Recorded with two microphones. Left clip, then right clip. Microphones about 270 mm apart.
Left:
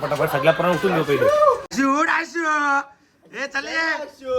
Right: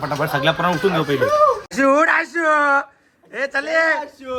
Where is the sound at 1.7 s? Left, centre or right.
Centre.